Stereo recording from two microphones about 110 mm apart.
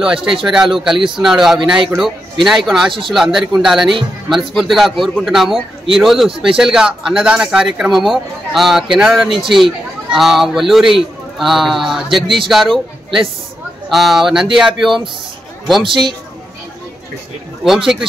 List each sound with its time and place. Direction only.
0.0 s speech: 5° right (ahead or behind)
15.8 s speech: 45° right (ahead or behind)
17.6 s speech: 5° right (ahead or behind)